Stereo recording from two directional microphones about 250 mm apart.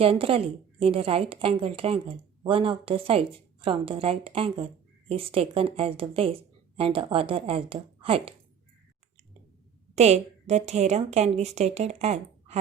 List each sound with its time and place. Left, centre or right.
0.0 s a woman's voice: right
9.9 s a woman's voice: right